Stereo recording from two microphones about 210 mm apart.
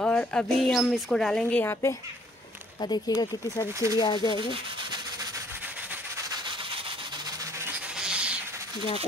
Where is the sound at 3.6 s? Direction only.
15° right (ahead or behind).